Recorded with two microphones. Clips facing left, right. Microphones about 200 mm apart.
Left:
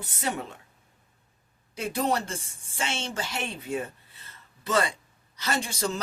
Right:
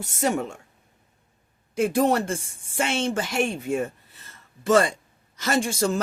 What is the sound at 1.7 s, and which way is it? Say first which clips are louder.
A woman's voice: right 7 dB; 50° right (ahead or behind).